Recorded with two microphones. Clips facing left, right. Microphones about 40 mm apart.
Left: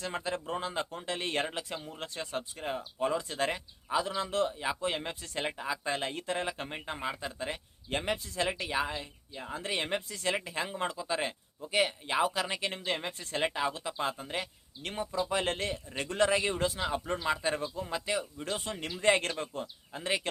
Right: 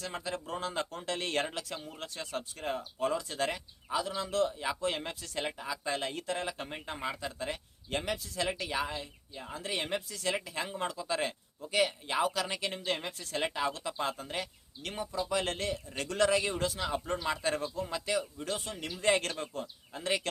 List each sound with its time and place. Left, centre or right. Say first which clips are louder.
0.0 s a man's voice: left 3 dB; left
1.9 s a man's voice: left 2 dB; left
2.6 s speech: even; centre
3.2 s a man's voice: left 2 dB; left
4.6 s a man's voice: left 1 dB; centre
13.4 s speech: left 1 dB; centre
15.2 s a man's voice: left 1 dB; left
18.6 s a man's voice: left 4 dB; left